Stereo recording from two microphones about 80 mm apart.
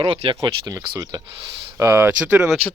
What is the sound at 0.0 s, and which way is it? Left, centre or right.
Speech, right.